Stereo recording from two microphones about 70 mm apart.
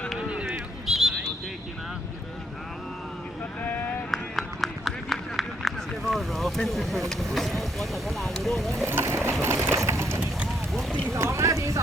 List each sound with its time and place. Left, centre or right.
0.2 s a sound: centre
3.6 s sheep: left
4.1 s run: centre
6.6 s speech: centre
8.9 s a sound: right
9.4 s sewing machine: right
11.1 s speech: right